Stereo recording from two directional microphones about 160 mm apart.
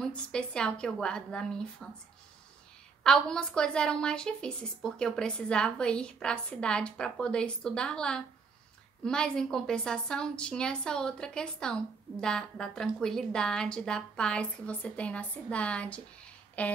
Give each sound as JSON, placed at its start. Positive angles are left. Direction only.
{"t": 0.0, "sound": "a woman's voice", "side_deg": 5}
{"t": 3.0, "sound": "a woman's voice", "side_deg": 5}
{"t": 16.6, "sound": "a sound", "side_deg": 10}